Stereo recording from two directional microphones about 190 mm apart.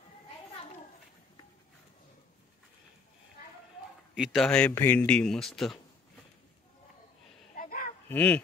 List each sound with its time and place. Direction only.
4.1 s speech: centre (ahead or behind)
7.5 s a sound: 45° left (ahead or behind)
8.1 s speech: 10° left (ahead or behind)